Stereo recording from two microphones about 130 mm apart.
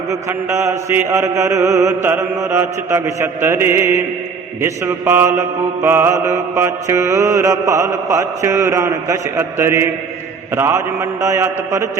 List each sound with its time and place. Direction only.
0.1 s mantra: 20° right (ahead or behind)